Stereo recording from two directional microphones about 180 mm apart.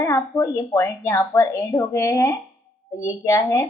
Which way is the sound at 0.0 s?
15° left (ahead or behind).